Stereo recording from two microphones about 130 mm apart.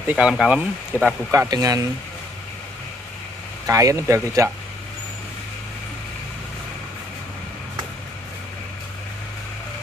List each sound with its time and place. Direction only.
0.0 s speech: 10° right (ahead or behind)
1.5 s speech: 25° right (ahead or behind)
3.6 s speech: 25° right (ahead or behind)